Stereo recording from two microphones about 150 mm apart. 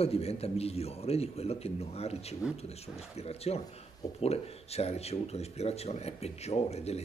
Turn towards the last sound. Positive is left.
turn(degrees=45)  # may be behind; listen again after turning